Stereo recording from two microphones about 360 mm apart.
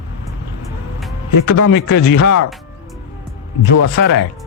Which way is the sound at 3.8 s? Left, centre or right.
Left.